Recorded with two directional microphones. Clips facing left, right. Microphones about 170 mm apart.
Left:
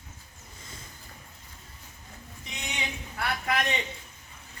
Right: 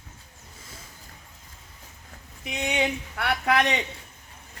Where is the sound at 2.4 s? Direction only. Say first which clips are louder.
Right 11 dB; 60° right (ahead or behind).